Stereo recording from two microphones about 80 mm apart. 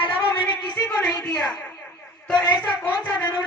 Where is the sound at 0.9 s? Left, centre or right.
Centre.